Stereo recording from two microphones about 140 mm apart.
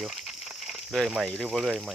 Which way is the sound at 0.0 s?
Centre (ahead or behind).